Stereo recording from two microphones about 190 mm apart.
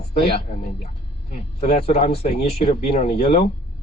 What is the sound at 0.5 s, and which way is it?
Speech, 35° left (ahead or behind).